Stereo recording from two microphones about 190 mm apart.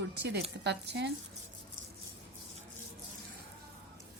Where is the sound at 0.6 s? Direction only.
65° right (ahead or behind).